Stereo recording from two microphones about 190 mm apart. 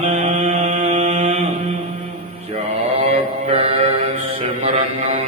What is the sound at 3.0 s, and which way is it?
Mantra, 30° right (ahead or behind).